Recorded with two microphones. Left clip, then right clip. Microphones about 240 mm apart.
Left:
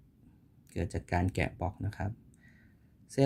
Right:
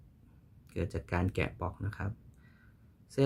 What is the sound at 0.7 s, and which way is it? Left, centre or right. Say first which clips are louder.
Speech: left 2 dB; centre.